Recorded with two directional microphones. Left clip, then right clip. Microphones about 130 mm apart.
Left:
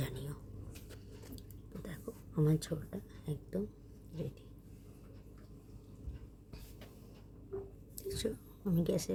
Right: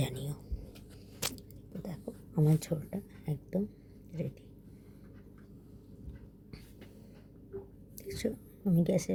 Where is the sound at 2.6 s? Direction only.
15° right (ahead or behind).